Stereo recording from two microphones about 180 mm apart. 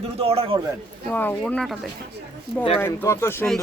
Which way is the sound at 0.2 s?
35° right (ahead or behind).